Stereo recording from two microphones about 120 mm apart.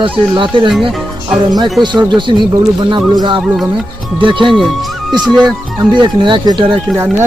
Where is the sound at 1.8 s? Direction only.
40° right (ahead or behind).